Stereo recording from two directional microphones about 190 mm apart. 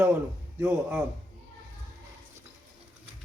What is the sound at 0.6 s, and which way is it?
Speech, 10° right (ahead or behind).